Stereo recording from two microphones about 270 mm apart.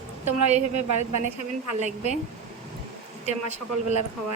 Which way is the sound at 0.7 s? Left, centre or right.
Right.